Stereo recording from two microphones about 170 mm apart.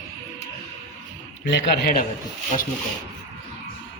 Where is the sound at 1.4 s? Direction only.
85° left; by 2.0 s 65° left (ahead or behind).